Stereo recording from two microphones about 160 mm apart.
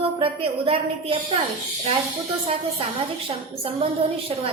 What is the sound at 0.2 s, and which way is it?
Speech, 35° right (ahead or behind).